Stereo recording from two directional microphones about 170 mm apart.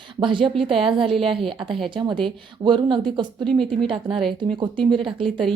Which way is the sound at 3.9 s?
30° right (ahead or behind).